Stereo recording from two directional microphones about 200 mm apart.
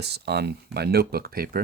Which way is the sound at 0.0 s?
55° right (ahead or behind).